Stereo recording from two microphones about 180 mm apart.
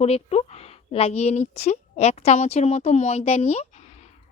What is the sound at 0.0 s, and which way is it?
A woman's voice, 35° left (ahead or behind).